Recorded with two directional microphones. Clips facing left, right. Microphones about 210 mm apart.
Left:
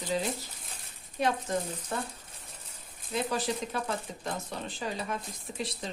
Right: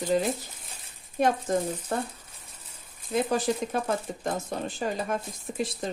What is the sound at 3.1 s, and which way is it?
Speech, 50° right (ahead or behind).